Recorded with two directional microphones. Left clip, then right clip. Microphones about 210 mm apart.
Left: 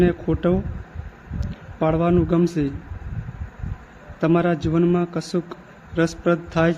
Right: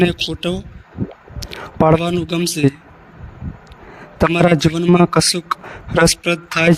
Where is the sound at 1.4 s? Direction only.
50° right (ahead or behind).